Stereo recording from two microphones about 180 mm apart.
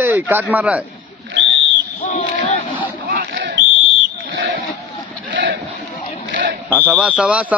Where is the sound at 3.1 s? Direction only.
65° right (ahead or behind).